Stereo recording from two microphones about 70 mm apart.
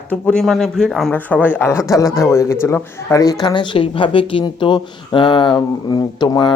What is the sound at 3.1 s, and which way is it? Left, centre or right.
Speech, left.